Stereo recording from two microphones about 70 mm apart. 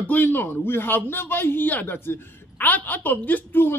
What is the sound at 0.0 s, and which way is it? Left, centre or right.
A man's voice, left.